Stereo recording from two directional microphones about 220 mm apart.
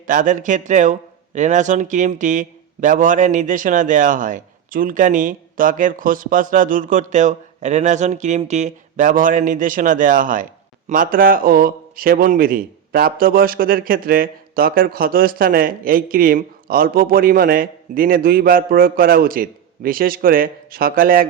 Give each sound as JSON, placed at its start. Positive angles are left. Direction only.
{"t": 0.1, "sound": "speech", "side_deg": -35}